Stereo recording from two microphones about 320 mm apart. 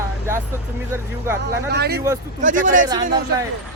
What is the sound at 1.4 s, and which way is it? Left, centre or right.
A man's voice, right.